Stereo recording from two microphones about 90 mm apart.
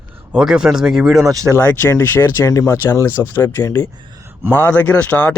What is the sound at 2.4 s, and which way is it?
Speech, 35° left (ahead or behind).